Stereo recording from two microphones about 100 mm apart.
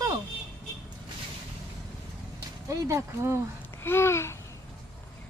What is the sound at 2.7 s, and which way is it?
Speech, 30° right (ahead or behind).